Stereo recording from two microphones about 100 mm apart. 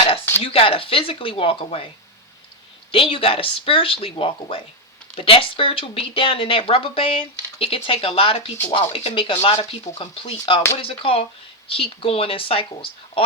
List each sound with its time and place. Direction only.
0.4 s speech: 65° left (ahead or behind)
2.9 s speech: 65° left (ahead or behind)